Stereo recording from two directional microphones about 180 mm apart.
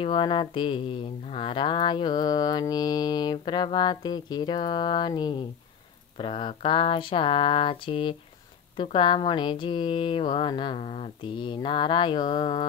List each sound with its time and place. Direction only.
0.0 s mantra: 25° left (ahead or behind)